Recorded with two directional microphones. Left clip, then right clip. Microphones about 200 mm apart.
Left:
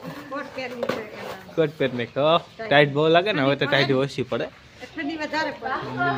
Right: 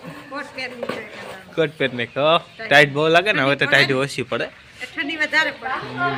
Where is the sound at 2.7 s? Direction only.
5° right (ahead or behind).